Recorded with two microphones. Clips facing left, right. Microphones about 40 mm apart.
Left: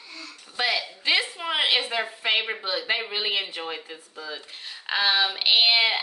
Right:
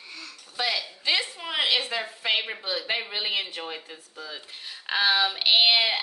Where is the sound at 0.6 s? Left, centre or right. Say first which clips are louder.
Left 3 dB; left.